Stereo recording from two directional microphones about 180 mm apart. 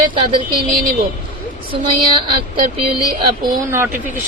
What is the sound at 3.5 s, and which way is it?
Speech, 15° right (ahead or behind).